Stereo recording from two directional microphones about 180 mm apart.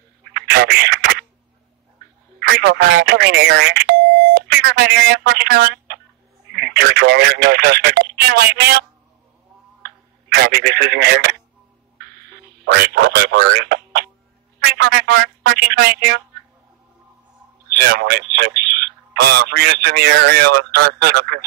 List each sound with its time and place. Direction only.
0.3 s a sound: 65° right (ahead or behind)
2.5 s speech: 75° right (ahead or behind)
9.8 s a sound: 65° right (ahead or behind)
12.6 s speech: 70° right (ahead or behind)
15.5 s speech: 65° right (ahead or behind)
17.7 s speech: 60° right (ahead or behind)